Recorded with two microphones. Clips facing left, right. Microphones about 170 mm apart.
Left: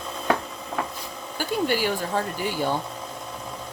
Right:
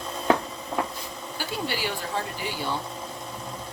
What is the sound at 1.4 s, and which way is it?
Speech, 45° left (ahead or behind).